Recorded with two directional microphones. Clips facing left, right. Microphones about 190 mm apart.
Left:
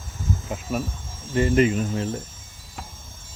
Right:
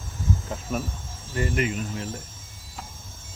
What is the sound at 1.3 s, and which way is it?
Speech, 30° left (ahead or behind).